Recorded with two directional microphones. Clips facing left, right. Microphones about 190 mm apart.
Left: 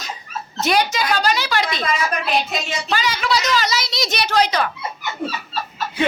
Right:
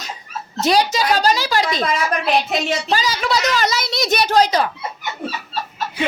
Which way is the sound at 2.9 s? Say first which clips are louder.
Left 1 dB; 45° right (ahead or behind).